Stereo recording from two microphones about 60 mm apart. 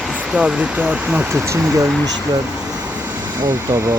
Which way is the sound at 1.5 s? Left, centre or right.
Right.